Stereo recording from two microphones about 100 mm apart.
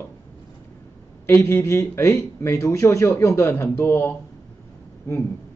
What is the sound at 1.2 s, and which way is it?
Speech, 25° left (ahead or behind).